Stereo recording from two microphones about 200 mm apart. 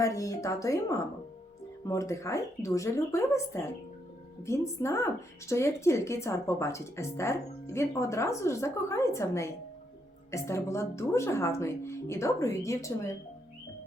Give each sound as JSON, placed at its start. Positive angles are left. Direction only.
{"t": 0.0, "sound": "a woman's voice", "side_deg": 15}